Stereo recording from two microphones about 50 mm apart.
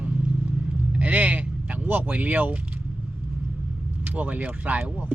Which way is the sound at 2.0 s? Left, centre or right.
Right.